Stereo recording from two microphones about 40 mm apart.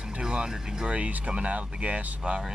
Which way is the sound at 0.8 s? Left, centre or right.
Right.